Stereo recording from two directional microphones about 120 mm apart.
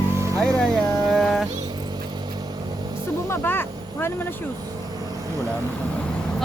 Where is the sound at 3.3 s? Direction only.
20° left (ahead or behind).